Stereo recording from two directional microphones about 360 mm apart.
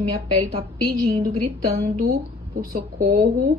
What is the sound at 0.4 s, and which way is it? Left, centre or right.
A woman's voice, right.